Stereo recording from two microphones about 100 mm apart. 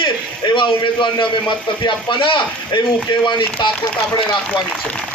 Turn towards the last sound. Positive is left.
turn(degrees=50)  # may be behind; listen again after turning